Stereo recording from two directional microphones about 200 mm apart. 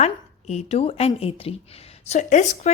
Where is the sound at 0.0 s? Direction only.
35° left (ahead or behind).